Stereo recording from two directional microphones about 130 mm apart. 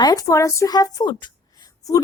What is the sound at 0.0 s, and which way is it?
A woman's voice, 30° left (ahead or behind).